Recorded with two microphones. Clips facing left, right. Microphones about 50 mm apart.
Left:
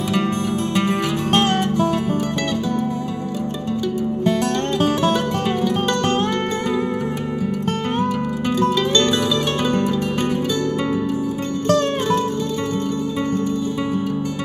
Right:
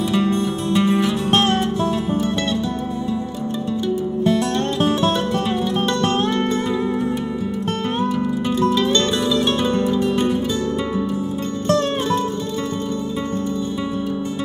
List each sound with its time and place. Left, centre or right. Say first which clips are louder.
0.2 s music: right 1 dB; left